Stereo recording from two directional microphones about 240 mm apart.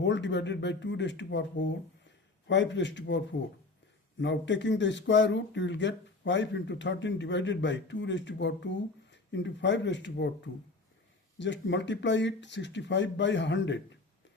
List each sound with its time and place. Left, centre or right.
0.0 s speech: left